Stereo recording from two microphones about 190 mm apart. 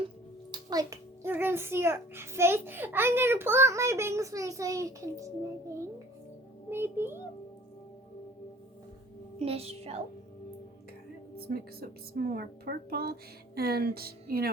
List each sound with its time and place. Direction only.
0.5 s a child's voice: 20° right (ahead or behind)
9.4 s a woman's voice: 30° right (ahead or behind)
11.4 s a child's voice: 55° right (ahead or behind)